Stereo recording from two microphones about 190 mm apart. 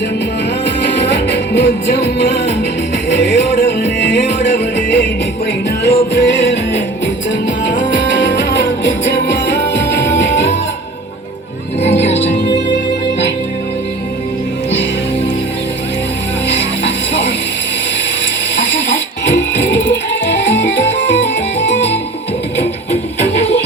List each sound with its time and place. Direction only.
0.6 s music: 65° left (ahead or behind)
11.8 s music: 35° left (ahead or behind)
12.7 s music: 70° left (ahead or behind)
16.5 s music: 70° left (ahead or behind)
18.5 s music: 70° left (ahead or behind)